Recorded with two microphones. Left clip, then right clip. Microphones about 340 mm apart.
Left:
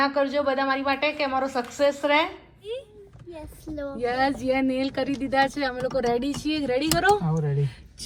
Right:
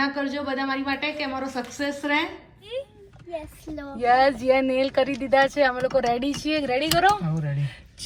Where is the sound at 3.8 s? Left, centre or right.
Centre.